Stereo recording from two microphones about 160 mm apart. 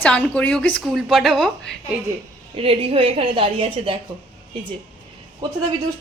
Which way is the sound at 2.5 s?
35° right (ahead or behind).